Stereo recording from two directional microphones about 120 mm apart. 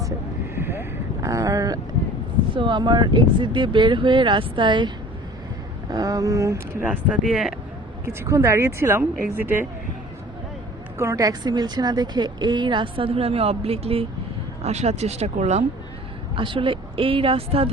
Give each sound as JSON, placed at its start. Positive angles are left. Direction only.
{"t": 0.5, "sound": "vehicle", "side_deg": -20}
{"t": 2.5, "sound": "a woman's voice", "side_deg": -40}
{"t": 5.9, "sound": "speech", "side_deg": -30}
{"t": 8.0, "sound": "speech", "side_deg": -25}
{"t": 10.9, "sound": "a woman's voice", "side_deg": -25}
{"t": 14.6, "sound": "speech", "side_deg": -65}
{"t": 16.3, "sound": "speech", "side_deg": -45}